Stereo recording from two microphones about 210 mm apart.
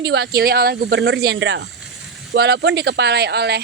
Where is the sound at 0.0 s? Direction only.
50° right (ahead or behind).